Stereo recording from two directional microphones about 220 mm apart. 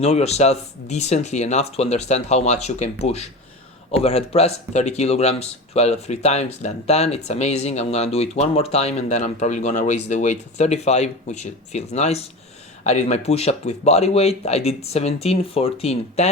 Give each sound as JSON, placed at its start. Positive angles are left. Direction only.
{"t": 0.0, "sound": "speech", "side_deg": 30}